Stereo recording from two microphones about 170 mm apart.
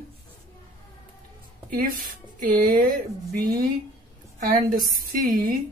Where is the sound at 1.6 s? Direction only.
55° right (ahead or behind).